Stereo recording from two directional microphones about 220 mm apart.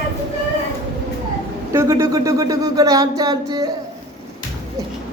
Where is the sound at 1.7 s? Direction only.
15° right (ahead or behind).